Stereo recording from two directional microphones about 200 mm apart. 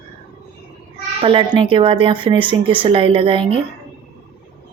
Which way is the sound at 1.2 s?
25° right (ahead or behind).